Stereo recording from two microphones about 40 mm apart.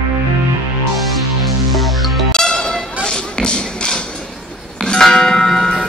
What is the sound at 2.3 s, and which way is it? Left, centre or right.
Music, centre.